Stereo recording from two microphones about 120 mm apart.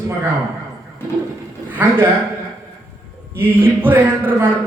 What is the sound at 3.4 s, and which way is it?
A man's voice, 15° right (ahead or behind).